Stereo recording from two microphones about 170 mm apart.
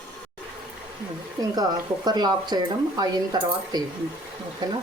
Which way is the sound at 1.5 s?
25° right (ahead or behind).